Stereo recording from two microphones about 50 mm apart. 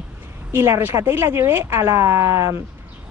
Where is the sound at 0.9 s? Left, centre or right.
Right.